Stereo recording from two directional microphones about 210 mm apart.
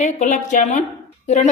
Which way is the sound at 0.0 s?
35° left (ahead or behind).